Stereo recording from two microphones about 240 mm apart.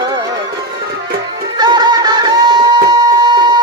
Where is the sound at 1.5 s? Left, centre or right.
Centre.